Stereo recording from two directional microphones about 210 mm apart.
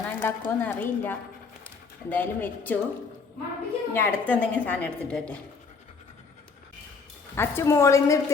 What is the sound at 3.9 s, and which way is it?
A woman's voice, 10° left (ahead or behind).